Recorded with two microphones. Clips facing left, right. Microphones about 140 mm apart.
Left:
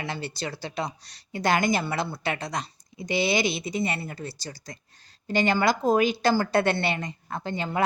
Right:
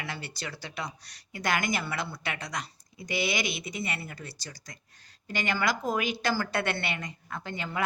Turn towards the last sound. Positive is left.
turn(degrees=30)  # may be behind; listen again after turning